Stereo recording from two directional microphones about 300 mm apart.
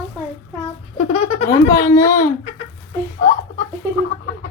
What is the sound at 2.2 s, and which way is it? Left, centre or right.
Chicken, centre.